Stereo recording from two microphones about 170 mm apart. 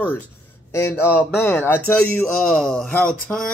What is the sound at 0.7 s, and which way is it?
Speech, 15° left (ahead or behind).